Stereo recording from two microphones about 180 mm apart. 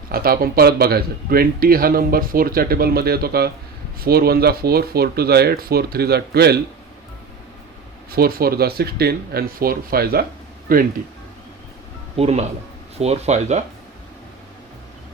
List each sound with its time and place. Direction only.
0.1 s speech: 55° right (ahead or behind)
8.1 s speech: 55° right (ahead or behind)
12.1 s speech: 35° right (ahead or behind)